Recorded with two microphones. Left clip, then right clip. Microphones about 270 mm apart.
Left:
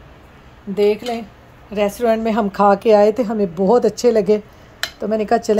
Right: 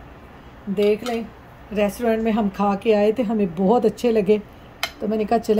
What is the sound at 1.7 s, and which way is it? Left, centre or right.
A woman's voice, centre.